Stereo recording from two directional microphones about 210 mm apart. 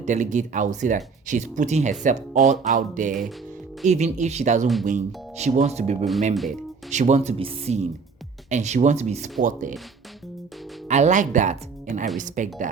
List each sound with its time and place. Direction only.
0.0 s speech: 35° right (ahead or behind)
10.8 s speech: 35° right (ahead or behind)